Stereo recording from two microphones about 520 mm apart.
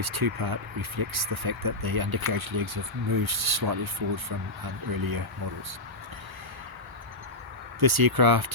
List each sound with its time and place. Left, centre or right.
0.0 s speech: right
7.8 s speech: right